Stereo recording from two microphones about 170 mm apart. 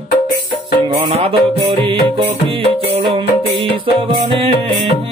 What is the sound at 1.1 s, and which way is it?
Music, 35° right (ahead or behind).